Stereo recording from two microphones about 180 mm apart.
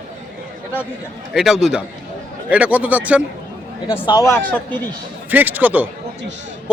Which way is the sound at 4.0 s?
20° left (ahead or behind).